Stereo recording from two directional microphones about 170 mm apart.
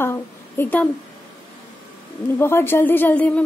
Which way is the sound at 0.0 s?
15° left (ahead or behind).